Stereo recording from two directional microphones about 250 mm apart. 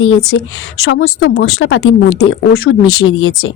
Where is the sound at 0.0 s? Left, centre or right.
Left.